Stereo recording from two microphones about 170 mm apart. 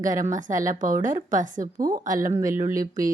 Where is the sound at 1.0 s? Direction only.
50° right (ahead or behind).